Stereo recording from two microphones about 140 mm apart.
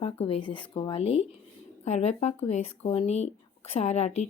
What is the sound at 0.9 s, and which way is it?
A woman's voice, 45° left (ahead or behind).